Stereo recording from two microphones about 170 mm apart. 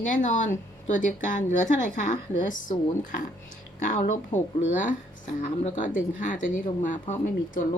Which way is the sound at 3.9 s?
50° left (ahead or behind).